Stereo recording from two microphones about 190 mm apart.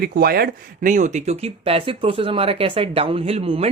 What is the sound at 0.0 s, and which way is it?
Speech, 50° right (ahead or behind).